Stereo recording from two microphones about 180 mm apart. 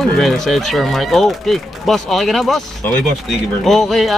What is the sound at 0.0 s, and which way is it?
Speech, centre (ahead or behind).